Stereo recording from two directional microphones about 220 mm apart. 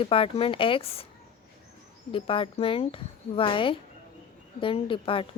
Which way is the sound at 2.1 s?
25° left (ahead or behind).